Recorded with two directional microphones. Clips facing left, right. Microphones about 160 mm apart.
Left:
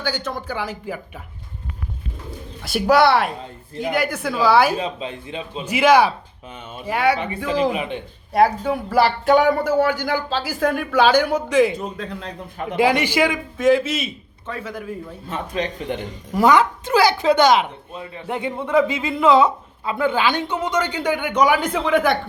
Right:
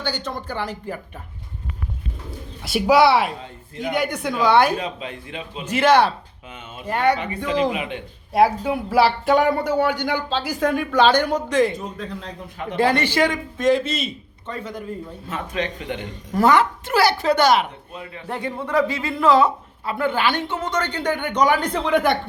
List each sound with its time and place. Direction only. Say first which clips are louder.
0.0 s speech: left 1 dB; 5° left (ahead or behind)
2.6 s speech: even; centre (ahead or behind)
4.8 s a man's voice: left 3 dB; 25° left (ahead or behind)
5.6 s speech: left 1 dB; 10° left (ahead or behind)
15.3 s speech: left 1 dB; 35° left (ahead or behind)
16.3 s speech: left 1 dB; 15° left (ahead or behind)